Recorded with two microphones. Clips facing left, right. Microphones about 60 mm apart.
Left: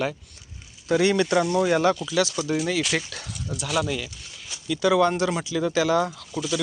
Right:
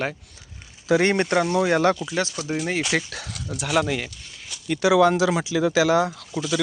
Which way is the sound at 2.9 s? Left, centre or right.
Right.